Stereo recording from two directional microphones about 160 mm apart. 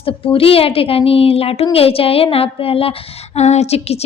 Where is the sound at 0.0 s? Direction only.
35° left (ahead or behind).